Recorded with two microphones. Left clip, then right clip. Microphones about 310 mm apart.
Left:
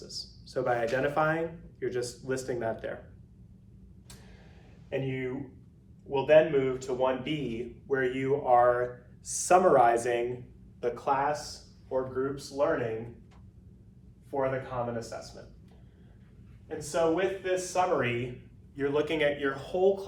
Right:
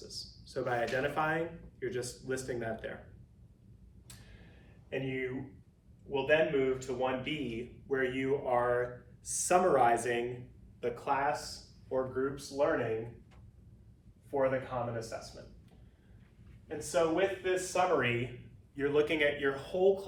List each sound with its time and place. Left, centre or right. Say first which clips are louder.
0.1 s a man's voice: left 7 dB; centre
4.9 s a man's voice: left 3 dB; centre
14.3 s a man's voice: left 1 dB; centre
16.6 s speech: left 3 dB; centre